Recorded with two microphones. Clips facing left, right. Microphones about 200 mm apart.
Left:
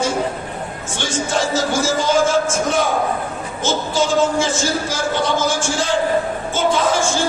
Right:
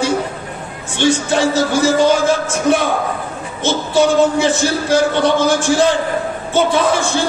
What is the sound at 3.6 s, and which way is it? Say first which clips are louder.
Speech: right 5 dB; 60° right (ahead or behind).